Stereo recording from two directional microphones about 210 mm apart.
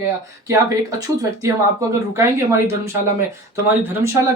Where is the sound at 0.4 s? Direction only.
15° right (ahead or behind).